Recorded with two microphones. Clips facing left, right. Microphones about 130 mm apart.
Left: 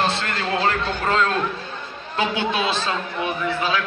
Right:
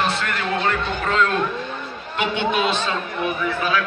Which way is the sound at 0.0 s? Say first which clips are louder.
Even; 30° left (ahead or behind).